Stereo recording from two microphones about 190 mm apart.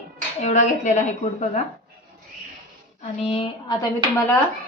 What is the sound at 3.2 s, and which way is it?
Speech, 30° left (ahead or behind).